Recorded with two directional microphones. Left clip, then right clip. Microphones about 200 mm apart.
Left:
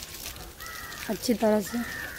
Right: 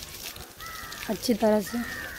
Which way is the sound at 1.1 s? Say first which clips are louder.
Right 1 dB; 5° right (ahead or behind).